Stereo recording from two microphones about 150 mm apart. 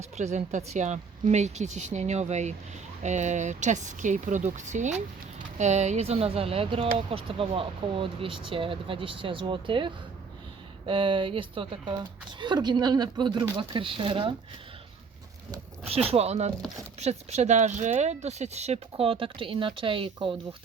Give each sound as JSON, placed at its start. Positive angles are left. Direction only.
{"t": 0.0, "sound": "speech", "side_deg": -50}
{"t": 15.9, "sound": "speech", "side_deg": -45}